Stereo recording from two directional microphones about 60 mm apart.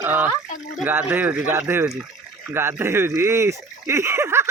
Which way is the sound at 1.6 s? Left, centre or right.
Right.